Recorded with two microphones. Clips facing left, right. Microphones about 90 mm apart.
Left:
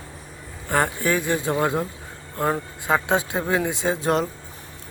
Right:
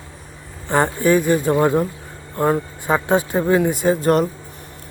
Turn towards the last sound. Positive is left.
turn(degrees=0)  # may be behind; listen again after turning